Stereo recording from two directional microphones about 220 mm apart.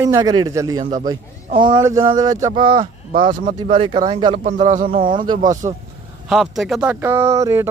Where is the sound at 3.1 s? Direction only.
35° right (ahead or behind).